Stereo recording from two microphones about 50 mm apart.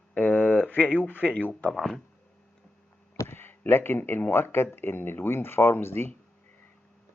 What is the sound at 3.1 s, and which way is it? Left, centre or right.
Speech, left.